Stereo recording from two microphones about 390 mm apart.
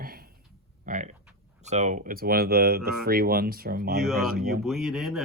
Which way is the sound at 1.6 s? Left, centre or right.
Centre.